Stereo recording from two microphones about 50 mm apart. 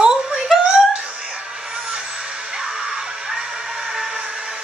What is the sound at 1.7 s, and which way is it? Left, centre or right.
Vehicle, centre.